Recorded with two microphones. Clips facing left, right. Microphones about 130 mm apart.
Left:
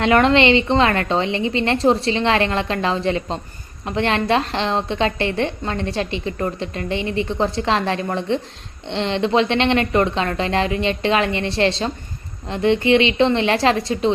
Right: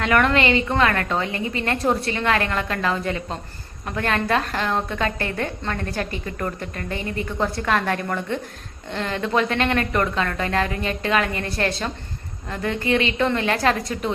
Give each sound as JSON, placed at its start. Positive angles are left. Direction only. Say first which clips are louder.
{"t": 0.0, "sound": "a woman's voice", "louder": "left 5 dB", "side_deg": 25}
{"t": 6.9, "sound": "a woman's voice", "louder": "left 6 dB", "side_deg": -45}
{"t": 7.3, "sound": "a woman's voice", "louder": "left 1 dB", "side_deg": 25}